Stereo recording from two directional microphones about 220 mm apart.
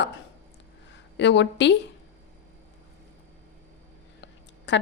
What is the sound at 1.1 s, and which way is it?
Speech, 55° left (ahead or behind).